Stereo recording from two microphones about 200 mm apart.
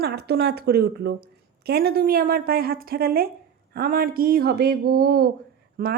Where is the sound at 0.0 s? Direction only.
50° right (ahead or behind).